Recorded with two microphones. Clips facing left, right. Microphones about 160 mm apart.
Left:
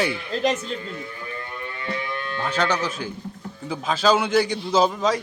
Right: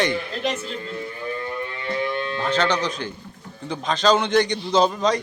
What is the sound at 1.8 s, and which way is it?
Music, 25° right (ahead or behind).